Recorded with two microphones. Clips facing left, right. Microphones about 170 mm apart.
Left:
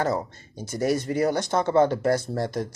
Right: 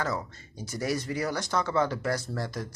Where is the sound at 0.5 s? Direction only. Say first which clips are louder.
Left 4 dB; 20° left (ahead or behind).